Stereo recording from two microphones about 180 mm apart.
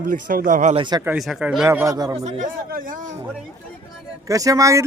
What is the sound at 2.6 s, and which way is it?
Speech, 50° right (ahead or behind).